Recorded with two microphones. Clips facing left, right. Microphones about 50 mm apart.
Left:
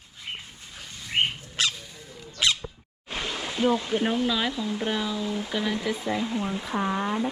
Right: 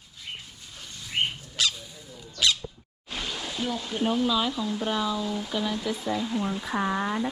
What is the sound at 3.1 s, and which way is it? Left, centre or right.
Speech, left.